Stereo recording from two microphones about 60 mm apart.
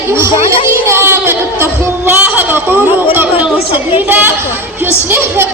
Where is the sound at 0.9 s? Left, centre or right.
Right.